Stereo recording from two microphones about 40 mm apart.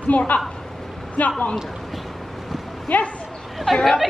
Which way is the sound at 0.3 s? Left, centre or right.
Left.